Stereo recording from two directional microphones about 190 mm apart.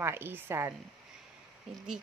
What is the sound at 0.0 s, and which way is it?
Speech, 10° right (ahead or behind).